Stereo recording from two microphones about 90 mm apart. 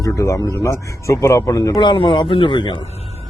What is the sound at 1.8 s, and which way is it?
Speech, 60° left (ahead or behind).